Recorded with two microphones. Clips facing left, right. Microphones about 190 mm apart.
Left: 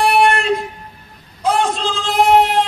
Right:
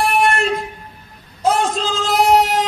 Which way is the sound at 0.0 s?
45° right (ahead or behind).